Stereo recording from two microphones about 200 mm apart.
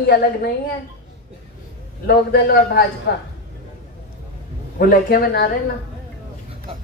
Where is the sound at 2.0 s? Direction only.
50° left (ahead or behind).